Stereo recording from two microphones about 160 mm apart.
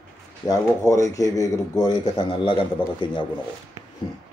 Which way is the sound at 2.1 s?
30° left (ahead or behind).